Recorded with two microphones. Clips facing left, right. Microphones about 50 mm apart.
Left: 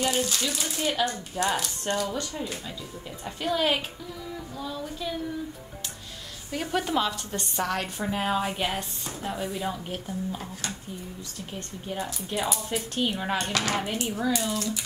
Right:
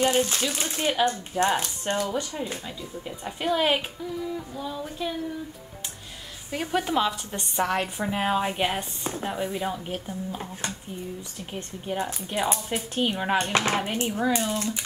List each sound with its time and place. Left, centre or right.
0.0 s speech: right
6.5 s a woman's voice: centre
11.5 s speech: right